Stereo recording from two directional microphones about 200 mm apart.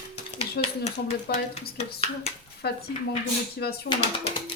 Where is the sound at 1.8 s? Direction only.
30° left (ahead or behind).